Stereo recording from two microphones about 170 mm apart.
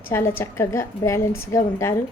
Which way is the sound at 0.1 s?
15° left (ahead or behind).